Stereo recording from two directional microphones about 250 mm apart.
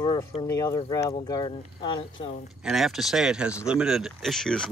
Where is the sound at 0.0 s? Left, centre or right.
Centre.